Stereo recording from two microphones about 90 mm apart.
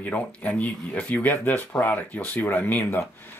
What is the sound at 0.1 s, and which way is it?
Speech, 20° left (ahead or behind).